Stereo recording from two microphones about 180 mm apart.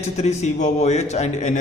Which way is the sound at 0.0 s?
40° left (ahead or behind).